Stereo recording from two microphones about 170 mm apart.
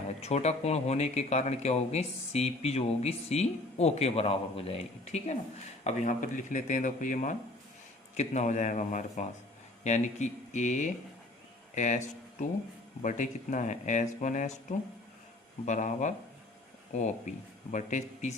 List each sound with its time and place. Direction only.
0.2 s speech: 40° left (ahead or behind)
5.8 s speech: 50° left (ahead or behind)